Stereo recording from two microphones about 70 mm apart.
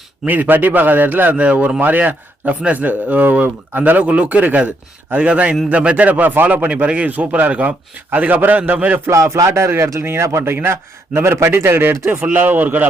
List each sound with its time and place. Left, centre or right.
0.3 s a man's voice: right
9.0 s a man's voice: right
12.3 s a man's voice: right